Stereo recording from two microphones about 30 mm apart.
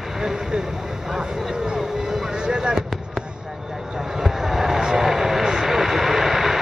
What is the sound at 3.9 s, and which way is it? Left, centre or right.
Vehicle, centre.